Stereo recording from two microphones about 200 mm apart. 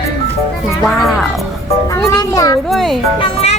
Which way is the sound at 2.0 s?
15° left (ahead or behind).